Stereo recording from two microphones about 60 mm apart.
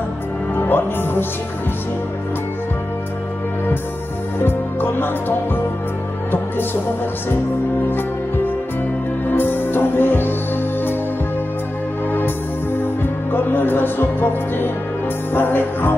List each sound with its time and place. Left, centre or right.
0.6 s music: left
4.4 s music: left
9.3 s music: left
12.7 s music: left